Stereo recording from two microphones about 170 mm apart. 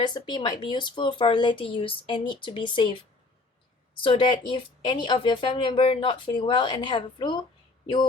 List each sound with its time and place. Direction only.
0.0 s speech: 25° left (ahead or behind)
4.0 s speech: 30° left (ahead or behind)